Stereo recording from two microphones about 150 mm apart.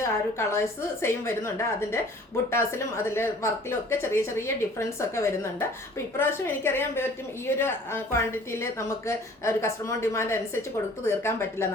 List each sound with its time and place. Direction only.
0.0 s a woman's voice: 20° left (ahead or behind)